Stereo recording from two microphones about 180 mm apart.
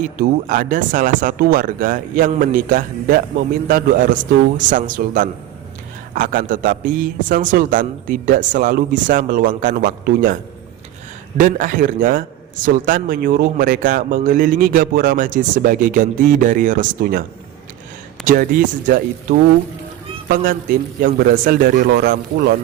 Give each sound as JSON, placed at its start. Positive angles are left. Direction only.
{"t": 0.0, "sound": "a man's voice", "side_deg": -50}
{"t": 11.3, "sound": "a man's voice", "side_deg": -50}
{"t": 18.3, "sound": "a man's voice", "side_deg": -50}